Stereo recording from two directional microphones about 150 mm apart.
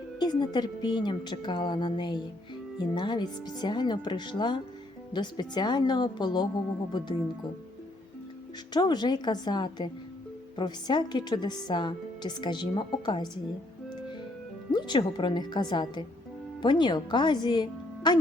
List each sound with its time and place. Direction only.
0.2 s a woman's voice: 30° left (ahead or behind)
8.7 s a woman's voice: 30° left (ahead or behind)
14.7 s a woman's voice: 30° left (ahead or behind)